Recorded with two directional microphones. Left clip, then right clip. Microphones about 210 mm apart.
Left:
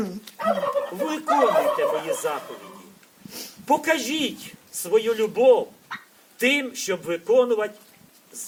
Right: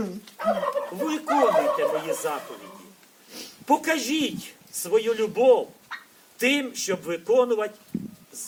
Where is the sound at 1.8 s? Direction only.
Centre (ahead or behind).